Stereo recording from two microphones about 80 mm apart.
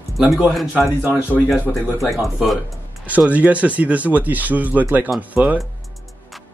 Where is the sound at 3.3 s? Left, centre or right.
Centre.